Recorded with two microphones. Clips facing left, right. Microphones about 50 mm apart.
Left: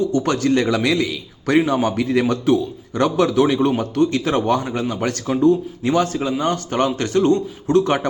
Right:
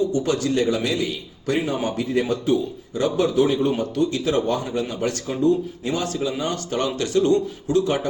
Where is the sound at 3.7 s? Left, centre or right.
Left.